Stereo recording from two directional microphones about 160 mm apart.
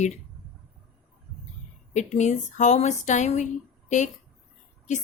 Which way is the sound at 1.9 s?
45° left (ahead or behind).